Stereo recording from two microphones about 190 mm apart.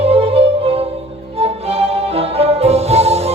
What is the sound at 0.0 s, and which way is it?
Music, 30° right (ahead or behind).